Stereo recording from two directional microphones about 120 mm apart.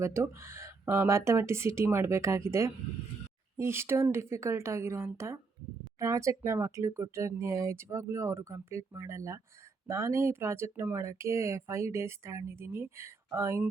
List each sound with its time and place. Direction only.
0.0 s speech: 20° right (ahead or behind)